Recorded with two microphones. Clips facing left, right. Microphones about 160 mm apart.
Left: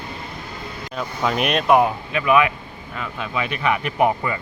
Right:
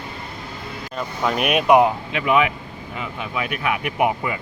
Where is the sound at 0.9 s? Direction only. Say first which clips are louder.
Even; centre (ahead or behind).